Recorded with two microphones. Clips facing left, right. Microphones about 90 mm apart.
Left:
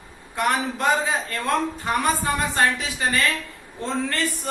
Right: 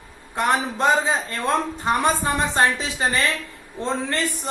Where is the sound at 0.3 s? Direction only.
25° right (ahead or behind).